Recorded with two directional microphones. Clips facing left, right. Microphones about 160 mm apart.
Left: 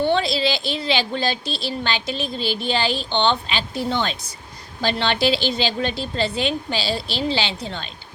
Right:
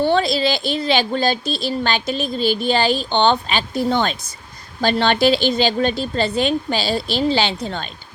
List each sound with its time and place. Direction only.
0.0 s a woman's voice: 45° right (ahead or behind)